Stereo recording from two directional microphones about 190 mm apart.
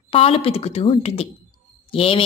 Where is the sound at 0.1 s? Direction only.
30° left (ahead or behind).